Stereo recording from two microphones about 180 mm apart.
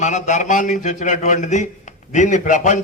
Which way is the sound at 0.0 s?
40° left (ahead or behind).